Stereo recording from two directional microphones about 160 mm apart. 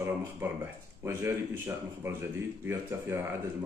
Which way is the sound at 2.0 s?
15° right (ahead or behind).